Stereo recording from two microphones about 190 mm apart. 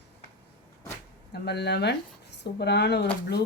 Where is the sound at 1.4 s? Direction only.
60° left (ahead or behind).